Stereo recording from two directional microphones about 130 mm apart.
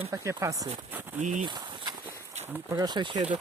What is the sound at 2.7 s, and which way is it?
Speech, 30° right (ahead or behind).